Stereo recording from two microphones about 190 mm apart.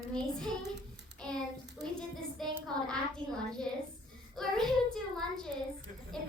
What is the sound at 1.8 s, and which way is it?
A child's voice, centre (ahead or behind).